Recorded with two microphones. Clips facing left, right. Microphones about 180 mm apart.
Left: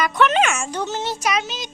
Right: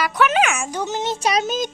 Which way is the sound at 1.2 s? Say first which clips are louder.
Right 3 dB; 30° right (ahead or behind).